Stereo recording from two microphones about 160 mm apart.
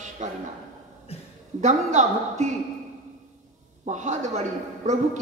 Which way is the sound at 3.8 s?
50° right (ahead or behind).